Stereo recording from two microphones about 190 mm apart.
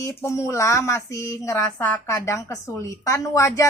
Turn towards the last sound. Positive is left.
turn(degrees=15)  # may be behind; listen again after turning